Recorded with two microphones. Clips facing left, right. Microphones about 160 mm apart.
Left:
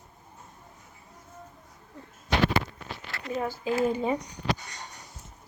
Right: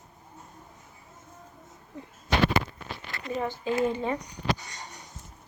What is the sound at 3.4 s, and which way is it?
Speech, 10° left (ahead or behind).